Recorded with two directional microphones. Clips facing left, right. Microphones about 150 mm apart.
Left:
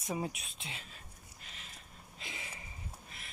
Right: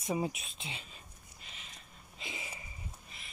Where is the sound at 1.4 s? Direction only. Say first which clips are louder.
Even; centre (ahead or behind).